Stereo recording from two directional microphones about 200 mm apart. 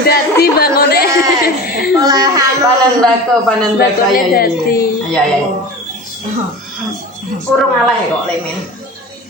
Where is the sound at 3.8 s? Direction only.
45° left (ahead or behind).